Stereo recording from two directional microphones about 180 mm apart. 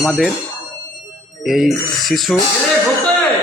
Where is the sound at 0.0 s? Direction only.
Centre (ahead or behind).